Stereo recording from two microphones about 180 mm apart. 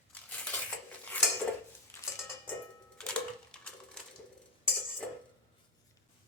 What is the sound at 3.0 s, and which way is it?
Typewriter, 5° left (ahead or behind).